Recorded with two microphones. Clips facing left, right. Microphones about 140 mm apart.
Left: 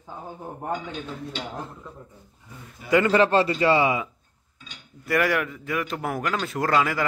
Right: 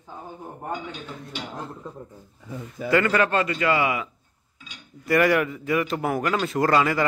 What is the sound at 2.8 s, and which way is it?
A man's voice, 15° left (ahead or behind).